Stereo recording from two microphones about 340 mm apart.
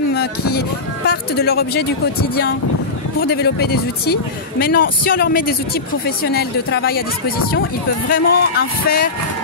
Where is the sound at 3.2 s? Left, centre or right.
Left.